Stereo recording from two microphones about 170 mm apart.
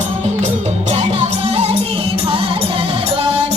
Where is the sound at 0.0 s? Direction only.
45° right (ahead or behind).